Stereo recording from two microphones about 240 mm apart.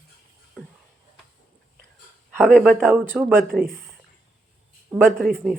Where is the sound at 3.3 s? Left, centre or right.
Right.